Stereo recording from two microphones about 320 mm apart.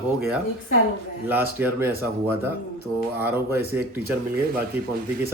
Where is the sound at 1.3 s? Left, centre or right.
Centre.